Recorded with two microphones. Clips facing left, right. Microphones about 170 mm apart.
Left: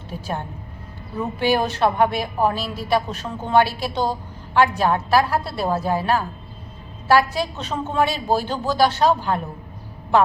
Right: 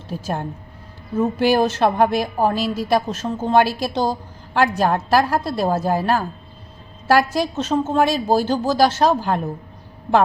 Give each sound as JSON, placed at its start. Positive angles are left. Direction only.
{"t": 0.1, "sound": "a woman's voice", "side_deg": -40}